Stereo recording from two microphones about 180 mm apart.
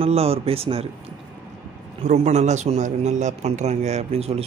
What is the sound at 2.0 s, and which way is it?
A man's voice, 40° right (ahead or behind).